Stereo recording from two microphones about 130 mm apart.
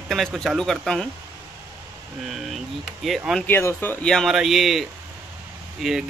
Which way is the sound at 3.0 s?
Centre (ahead or behind).